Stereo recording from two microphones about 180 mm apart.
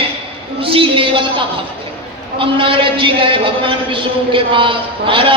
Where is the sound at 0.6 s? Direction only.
30° right (ahead or behind).